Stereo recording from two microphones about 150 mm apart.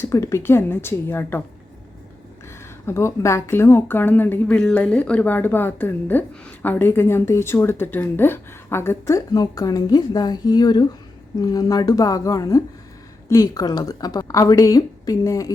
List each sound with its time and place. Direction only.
0.0 s speech: 20° left (ahead or behind)
2.8 s a woman's voice: 20° left (ahead or behind)